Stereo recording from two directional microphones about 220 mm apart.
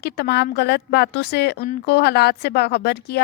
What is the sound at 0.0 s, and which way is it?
A woman's voice, 50° left (ahead or behind).